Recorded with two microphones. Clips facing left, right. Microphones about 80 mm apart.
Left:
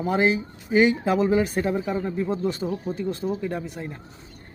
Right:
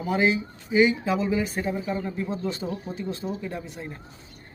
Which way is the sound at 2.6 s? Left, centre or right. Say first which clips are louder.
Left 4 dB; left.